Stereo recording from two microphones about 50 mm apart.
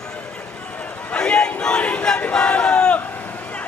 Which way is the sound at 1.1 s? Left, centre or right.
Centre.